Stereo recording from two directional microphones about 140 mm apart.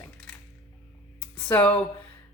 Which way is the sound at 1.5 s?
10° left (ahead or behind).